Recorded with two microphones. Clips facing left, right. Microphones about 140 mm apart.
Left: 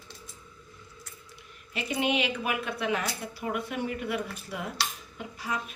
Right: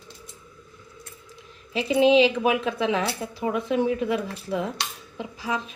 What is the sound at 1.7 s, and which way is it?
A woman's voice, 90° right.